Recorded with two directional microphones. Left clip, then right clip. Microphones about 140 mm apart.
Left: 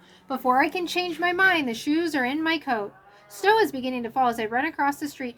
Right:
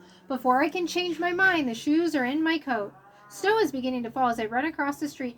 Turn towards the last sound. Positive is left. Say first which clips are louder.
# left 4 dB
turn(degrees=30)  # may be behind; listen again after turning